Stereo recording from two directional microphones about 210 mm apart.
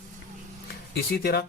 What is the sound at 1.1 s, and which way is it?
Speech, 50° left (ahead or behind).